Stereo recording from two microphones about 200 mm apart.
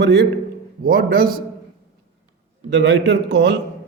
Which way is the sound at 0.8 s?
45° right (ahead or behind).